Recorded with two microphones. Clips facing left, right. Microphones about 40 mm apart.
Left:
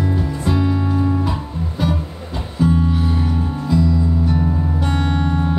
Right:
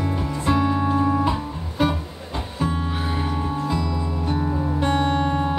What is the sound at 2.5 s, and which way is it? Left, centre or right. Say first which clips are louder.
Music: left 8 dB; centre.